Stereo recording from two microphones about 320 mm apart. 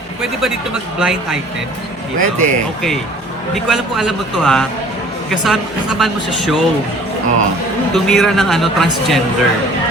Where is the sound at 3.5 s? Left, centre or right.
Centre.